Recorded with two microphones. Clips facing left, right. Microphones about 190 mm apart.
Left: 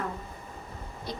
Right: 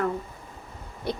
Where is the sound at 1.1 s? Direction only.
65° right (ahead or behind).